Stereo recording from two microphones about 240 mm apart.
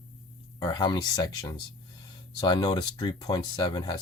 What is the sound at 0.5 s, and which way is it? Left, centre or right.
Speech, centre.